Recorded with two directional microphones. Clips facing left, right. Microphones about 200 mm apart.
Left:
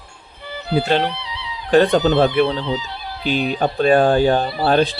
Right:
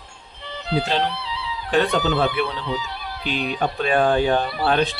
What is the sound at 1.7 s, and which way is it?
Speech, 40° left (ahead or behind).